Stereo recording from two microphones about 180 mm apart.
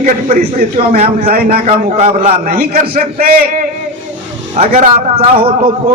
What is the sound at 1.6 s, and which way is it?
Speech, 40° right (ahead or behind).